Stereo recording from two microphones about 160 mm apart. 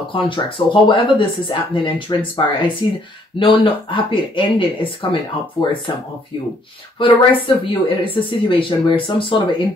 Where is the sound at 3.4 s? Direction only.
35° left (ahead or behind).